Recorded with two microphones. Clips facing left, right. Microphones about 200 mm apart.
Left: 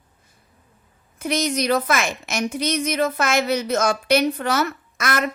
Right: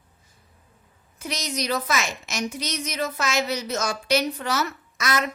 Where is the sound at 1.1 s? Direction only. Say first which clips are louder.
Left 8 dB; 55° left (ahead or behind).